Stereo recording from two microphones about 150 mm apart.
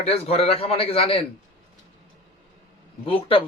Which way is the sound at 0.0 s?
45° left (ahead or behind).